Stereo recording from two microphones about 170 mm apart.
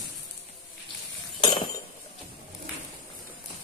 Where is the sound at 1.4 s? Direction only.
25° left (ahead or behind).